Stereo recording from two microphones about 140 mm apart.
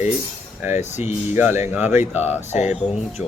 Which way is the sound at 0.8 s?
55° left (ahead or behind).